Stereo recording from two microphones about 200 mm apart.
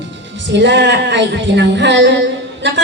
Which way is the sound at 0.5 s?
60° right (ahead or behind).